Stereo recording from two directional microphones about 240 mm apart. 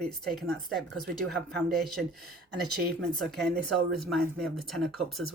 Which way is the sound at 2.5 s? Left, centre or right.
Right.